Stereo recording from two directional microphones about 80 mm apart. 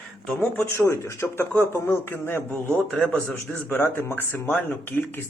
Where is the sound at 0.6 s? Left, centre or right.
Left.